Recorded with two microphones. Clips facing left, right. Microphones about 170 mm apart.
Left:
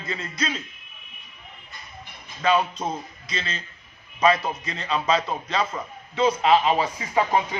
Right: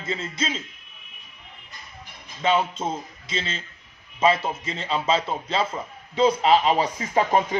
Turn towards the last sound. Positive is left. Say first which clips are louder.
# right 1 dB
turn(degrees=-45)  # may be behind; listen again after turning